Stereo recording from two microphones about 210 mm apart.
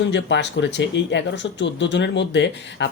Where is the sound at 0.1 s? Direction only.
55° left (ahead or behind).